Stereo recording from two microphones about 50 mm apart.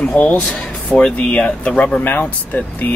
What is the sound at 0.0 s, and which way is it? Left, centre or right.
Speech, left.